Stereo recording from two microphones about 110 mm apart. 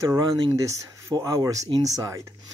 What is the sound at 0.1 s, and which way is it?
Speech, 30° right (ahead or behind).